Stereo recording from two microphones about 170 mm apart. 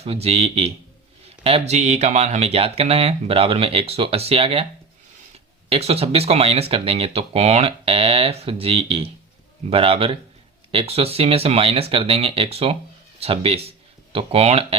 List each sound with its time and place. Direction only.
0.0 s speech: 35° right (ahead or behind)
5.6 s speech: 35° right (ahead or behind)